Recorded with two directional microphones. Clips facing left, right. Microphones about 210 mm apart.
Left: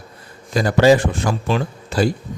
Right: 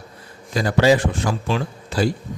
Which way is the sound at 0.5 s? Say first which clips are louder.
Left 3 dB; 45° left (ahead or behind).